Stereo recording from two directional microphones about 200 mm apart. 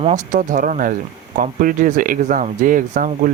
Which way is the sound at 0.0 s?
35° right (ahead or behind).